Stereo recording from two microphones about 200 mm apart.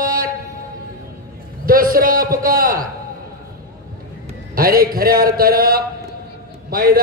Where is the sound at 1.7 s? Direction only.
45° right (ahead or behind).